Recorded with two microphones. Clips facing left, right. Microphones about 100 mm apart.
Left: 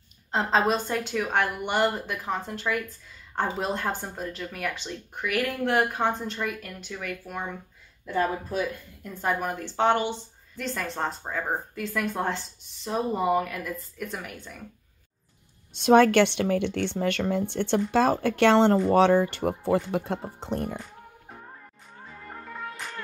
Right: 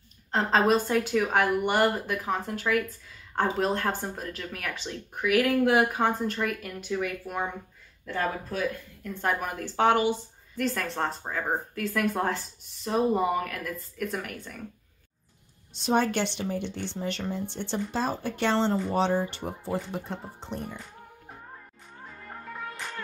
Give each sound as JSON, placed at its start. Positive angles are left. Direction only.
{"t": 0.3, "sound": "a woman's voice", "side_deg": 0}
{"t": 8.0, "sound": "speech", "side_deg": 10}
{"t": 9.1, "sound": "a woman's voice", "side_deg": 0}
{"t": 15.7, "sound": "speech", "side_deg": 70}